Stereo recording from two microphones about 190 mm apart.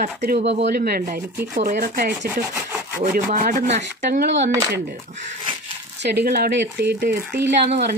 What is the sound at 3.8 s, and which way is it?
Speech, 60° right (ahead or behind).